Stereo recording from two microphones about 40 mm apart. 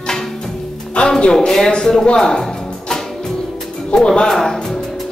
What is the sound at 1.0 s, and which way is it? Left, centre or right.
A woman's voice, left.